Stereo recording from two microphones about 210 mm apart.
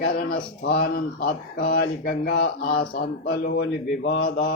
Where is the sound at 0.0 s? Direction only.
45° left (ahead or behind).